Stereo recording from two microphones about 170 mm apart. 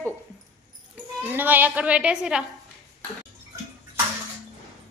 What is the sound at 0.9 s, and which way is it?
Speech, 10° right (ahead or behind).